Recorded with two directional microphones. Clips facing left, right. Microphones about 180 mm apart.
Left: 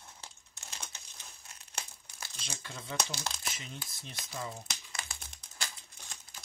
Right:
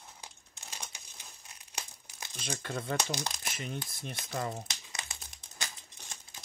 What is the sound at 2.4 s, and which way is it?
Speech, 60° right (ahead or behind).